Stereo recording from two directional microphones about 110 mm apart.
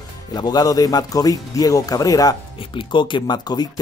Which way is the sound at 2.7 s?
45° left (ahead or behind).